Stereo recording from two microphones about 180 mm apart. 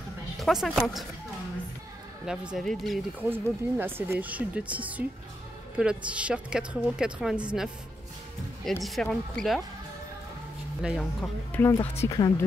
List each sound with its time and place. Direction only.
0.4 s a woman's voice: centre (ahead or behind)
2.2 s a woman's voice: centre (ahead or behind)
3.2 s a woman's voice: 10° right (ahead or behind)
8.8 s a woman's voice: centre (ahead or behind)
10.8 s a woman's voice: 5° right (ahead or behind)
11.5 s speech: 10° left (ahead or behind)